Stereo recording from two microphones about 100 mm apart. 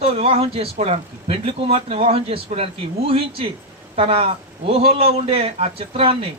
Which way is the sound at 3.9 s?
75° right (ahead or behind).